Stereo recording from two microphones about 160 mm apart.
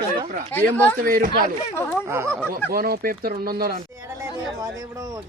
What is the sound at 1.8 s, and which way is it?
Speech, 15° left (ahead or behind).